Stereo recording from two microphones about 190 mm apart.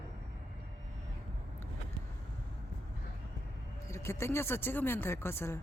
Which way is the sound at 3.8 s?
15° left (ahead or behind).